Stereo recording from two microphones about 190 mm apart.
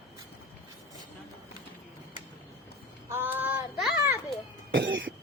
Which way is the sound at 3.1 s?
10° right (ahead or behind).